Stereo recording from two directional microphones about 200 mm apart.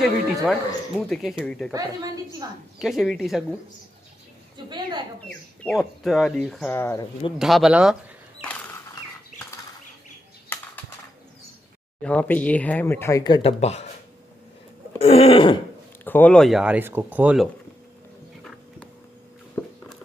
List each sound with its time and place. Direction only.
0.0 s speech: centre (ahead or behind)
2.4 s speech: 20° right (ahead or behind)
2.8 s speech: centre (ahead or behind)
4.6 s speech: 20° right (ahead or behind)
5.6 s speech: centre (ahead or behind)
7.3 s speech: centre (ahead or behind)
12.0 s speech: 5° left (ahead or behind); by 13.8 s 35° left (ahead or behind)
15.0 s throat clearing: 30° left (ahead or behind)
16.0 s speech: 10° left (ahead or behind); by 17.5 s 5° right (ahead or behind)
19.6 s a sound: 5° left (ahead or behind)